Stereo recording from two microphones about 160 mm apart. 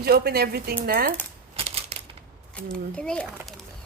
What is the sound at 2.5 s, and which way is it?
Speech, 5° left (ahead or behind).